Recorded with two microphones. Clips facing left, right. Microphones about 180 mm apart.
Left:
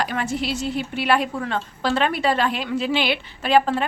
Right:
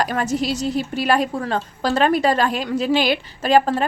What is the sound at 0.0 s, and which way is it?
A woman's voice, 40° right (ahead or behind).